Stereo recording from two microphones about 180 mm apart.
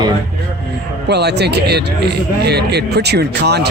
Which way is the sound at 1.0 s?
65° right (ahead or behind).